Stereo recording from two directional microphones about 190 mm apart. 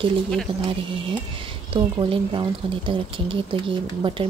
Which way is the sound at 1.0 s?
25° right (ahead or behind).